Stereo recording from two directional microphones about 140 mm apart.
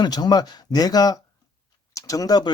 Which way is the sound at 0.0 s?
30° left (ahead or behind).